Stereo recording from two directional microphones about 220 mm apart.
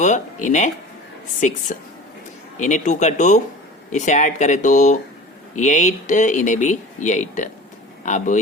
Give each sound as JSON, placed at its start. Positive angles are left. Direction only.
{"t": 0.0, "sound": "speech", "side_deg": 35}